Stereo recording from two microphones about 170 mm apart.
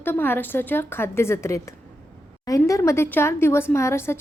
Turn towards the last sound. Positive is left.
turn(degrees=15)  # may be behind; listen again after turning